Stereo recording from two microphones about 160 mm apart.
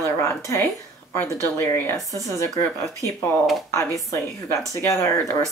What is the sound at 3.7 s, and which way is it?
A woman's voice, 20° left (ahead or behind).